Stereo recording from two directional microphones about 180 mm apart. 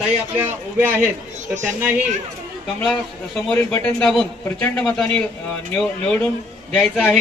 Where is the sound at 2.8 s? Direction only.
5° left (ahead or behind).